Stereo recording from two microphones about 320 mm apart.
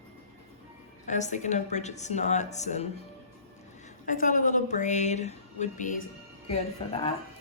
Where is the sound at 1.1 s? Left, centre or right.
Left.